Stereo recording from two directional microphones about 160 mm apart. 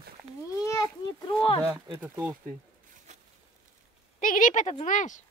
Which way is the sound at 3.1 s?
45° right (ahead or behind).